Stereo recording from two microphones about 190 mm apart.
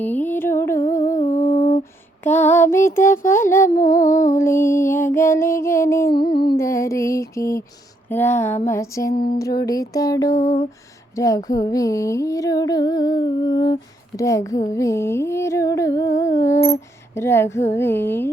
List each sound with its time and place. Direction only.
0.0 s music: 10° left (ahead or behind)
0.9 s humming: 15° left (ahead or behind)
1.2 s humming: 45° left (ahead or behind)
1.8 s a sound: 10° left (ahead or behind)
3.2 s music: 15° left (ahead or behind)
3.8 s humming: 45° left (ahead or behind)
4.4 s music: 15° left (ahead or behind)
10.4 s a sound: 40° left (ahead or behind)
11.1 s music: 15° left (ahead or behind)